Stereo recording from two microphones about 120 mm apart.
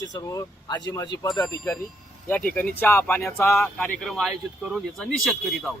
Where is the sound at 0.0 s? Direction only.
30° left (ahead or behind).